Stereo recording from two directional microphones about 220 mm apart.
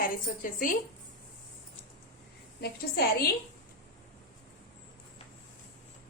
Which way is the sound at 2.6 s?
45° left (ahead or behind).